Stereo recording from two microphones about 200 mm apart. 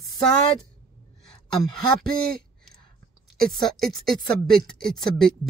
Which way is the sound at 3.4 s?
Centre (ahead or behind).